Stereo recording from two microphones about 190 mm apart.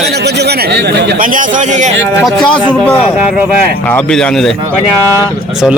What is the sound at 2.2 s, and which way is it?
Speech, centre (ahead or behind).